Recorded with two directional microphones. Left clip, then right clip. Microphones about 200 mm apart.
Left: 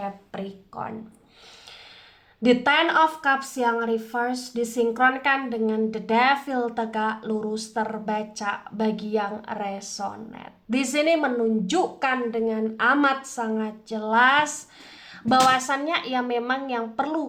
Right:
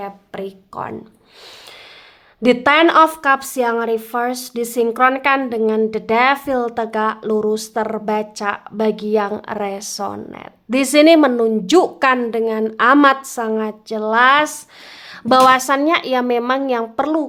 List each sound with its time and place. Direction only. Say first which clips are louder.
0.0 s speech: right 5 dB; 35° right (ahead or behind)
2.4 s a woman's voice: right 7 dB; 40° right (ahead or behind)